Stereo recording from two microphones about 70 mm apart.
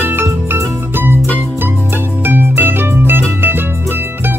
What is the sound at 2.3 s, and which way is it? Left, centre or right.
Music, right.